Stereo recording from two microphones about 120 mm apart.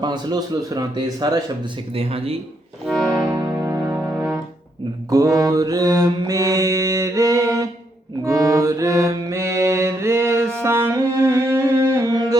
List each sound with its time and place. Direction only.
0.0 s a man's voice: 35° right (ahead or behind)
1.9 s speech: 50° right (ahead or behind)
2.8 s music: centre (ahead or behind)
3.3 s music: 25° right (ahead or behind)
5.0 s mantra: 30° right (ahead or behind)
10.6 s music: 20° right (ahead or behind)